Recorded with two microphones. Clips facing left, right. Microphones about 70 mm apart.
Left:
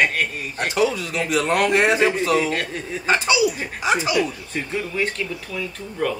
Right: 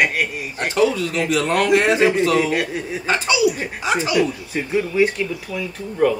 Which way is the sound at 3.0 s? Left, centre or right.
Left.